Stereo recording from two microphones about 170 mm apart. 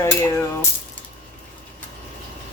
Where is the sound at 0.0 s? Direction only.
15° left (ahead or behind).